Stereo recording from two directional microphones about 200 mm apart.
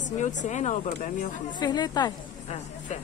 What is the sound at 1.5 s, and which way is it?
Speech, 20° left (ahead or behind).